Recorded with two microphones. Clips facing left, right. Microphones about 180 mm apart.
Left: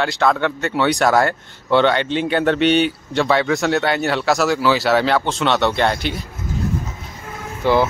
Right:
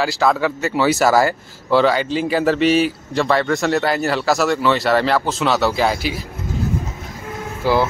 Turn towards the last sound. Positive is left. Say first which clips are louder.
# left 1 dB
turn(degrees=0)  # may be behind; listen again after turning